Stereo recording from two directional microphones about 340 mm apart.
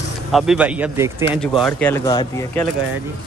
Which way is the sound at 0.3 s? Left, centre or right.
Centre.